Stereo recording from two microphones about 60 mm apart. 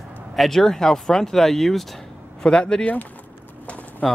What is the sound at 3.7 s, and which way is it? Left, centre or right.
Bird, left.